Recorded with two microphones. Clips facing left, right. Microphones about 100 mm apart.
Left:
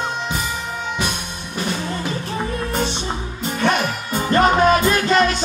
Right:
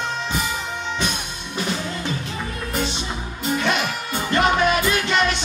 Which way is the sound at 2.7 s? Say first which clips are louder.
Left 3 dB; 35° left (ahead or behind).